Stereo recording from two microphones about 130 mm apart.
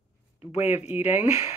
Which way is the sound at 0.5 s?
55° left (ahead or behind).